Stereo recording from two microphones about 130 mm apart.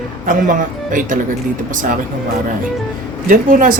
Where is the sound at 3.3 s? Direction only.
90° right.